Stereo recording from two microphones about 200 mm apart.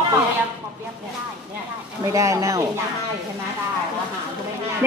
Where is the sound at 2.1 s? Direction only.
15° right (ahead or behind).